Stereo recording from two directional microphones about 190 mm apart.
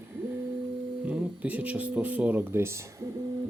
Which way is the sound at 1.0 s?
5° right (ahead or behind).